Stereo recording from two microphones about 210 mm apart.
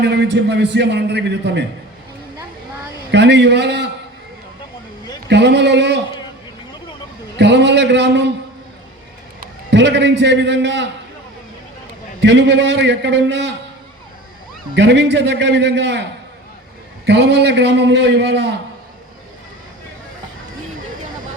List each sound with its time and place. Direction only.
0.0 s a man's voice: 55° right (ahead or behind)
3.1 s a man's voice: 55° right (ahead or behind)
5.3 s a man's voice: 55° right (ahead or behind)
7.3 s a man's voice: 55° right (ahead or behind)
9.6 s a man's voice: 55° right (ahead or behind)
12.2 s a man's voice: 55° right (ahead or behind)
14.8 s a man's voice: 55° right (ahead or behind)
17.1 s a man's voice: 55° right (ahead or behind)